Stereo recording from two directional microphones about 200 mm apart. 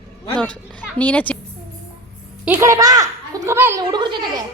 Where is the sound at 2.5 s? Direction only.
15° right (ahead or behind).